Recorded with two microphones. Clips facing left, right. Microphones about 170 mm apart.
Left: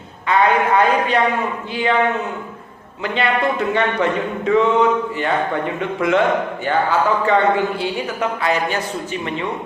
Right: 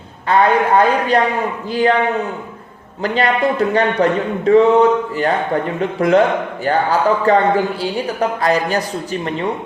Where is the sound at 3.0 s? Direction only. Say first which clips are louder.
Right 3 dB; 35° right (ahead or behind).